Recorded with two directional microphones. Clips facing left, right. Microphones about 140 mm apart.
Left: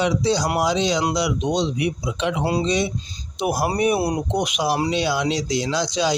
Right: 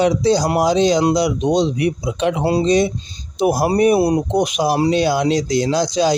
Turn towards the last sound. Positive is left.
turn(degrees=-45)  # may be behind; listen again after turning